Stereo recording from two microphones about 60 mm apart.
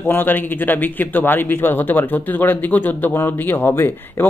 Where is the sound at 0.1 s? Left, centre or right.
Left.